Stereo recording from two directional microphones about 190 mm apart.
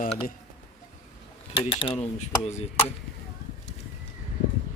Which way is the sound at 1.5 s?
30° left (ahead or behind).